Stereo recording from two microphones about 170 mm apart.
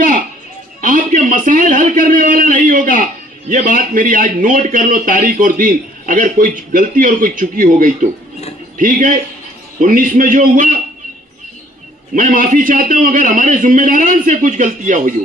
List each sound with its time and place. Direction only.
0.8 s a sound: 50° right (ahead or behind)
3.5 s a man's voice: 50° right (ahead or behind)
12.1 s a man's voice: 50° right (ahead or behind)